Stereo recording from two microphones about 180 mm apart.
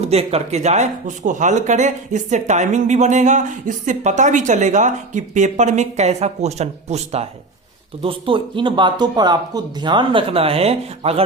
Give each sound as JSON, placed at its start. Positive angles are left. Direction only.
{"t": 0.0, "sound": "speech", "side_deg": -35}